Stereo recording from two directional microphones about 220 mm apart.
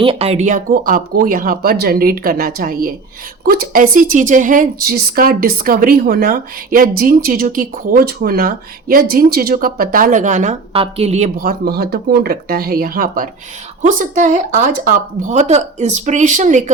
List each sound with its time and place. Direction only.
0.0 s a woman's voice: 25° right (ahead or behind)